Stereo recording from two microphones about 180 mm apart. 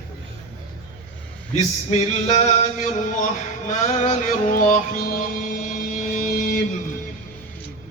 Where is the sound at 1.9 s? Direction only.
40° left (ahead or behind).